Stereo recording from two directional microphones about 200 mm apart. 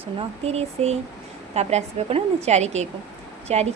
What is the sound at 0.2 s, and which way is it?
Speech, 30° right (ahead or behind).